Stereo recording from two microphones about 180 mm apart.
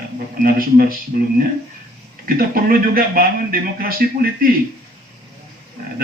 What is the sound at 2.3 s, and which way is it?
A man's voice, 55° right (ahead or behind).